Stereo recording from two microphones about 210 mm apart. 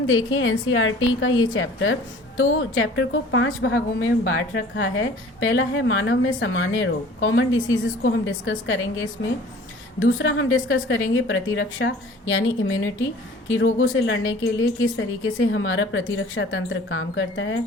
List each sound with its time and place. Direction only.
0.1 s a woman's voice: 70° left (ahead or behind)